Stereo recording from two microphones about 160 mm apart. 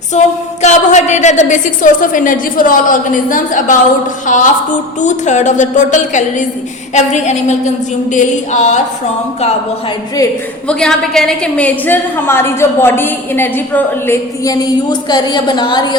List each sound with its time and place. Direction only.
0.1 s a woman's voice: 45° left (ahead or behind)
10.7 s a woman's voice: 5° left (ahead or behind); by 16.0 s 25° left (ahead or behind)